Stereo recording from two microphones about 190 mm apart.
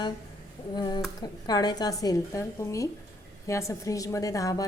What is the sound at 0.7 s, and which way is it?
A woman's voice, 20° left (ahead or behind).